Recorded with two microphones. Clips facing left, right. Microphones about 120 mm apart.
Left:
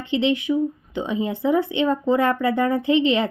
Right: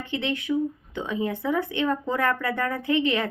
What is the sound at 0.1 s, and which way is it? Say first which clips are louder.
Speech: left 6 dB; 20° left (ahead or behind).